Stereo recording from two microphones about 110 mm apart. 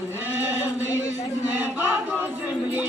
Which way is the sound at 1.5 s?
20° right (ahead or behind).